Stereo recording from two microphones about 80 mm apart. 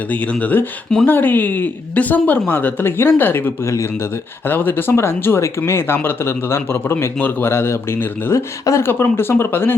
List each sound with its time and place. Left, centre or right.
0.1 s speech: centre